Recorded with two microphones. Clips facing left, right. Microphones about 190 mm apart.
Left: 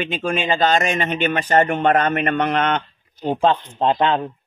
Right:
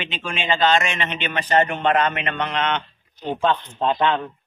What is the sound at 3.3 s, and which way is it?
Speech, 35° left (ahead or behind).